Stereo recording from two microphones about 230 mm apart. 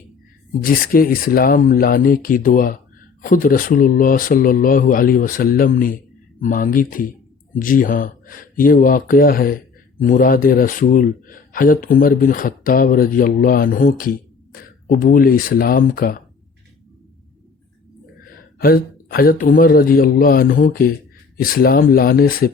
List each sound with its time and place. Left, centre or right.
0.6 s speech: left
18.6 s speech: left